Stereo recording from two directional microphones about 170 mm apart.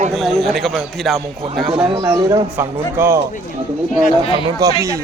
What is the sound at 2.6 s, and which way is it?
Speech, 15° right (ahead or behind).